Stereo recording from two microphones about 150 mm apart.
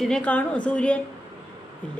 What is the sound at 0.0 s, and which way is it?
Speech, 5° left (ahead or behind).